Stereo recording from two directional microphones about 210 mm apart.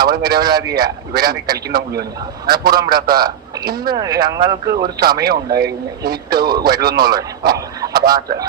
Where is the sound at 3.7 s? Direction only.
45° right (ahead or behind).